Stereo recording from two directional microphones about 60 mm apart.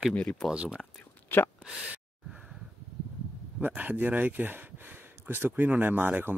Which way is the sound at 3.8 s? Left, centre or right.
Right.